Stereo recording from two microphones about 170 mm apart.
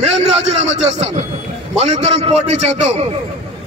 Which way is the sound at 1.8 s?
40° right (ahead or behind).